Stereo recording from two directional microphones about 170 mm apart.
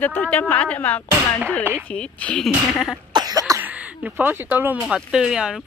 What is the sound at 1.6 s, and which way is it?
Speech, 10° right (ahead or behind).